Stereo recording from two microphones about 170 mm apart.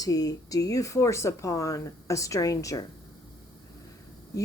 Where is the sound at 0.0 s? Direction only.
20° left (ahead or behind).